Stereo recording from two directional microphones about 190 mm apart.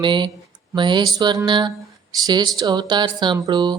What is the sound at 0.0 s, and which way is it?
Speech, 25° right (ahead or behind).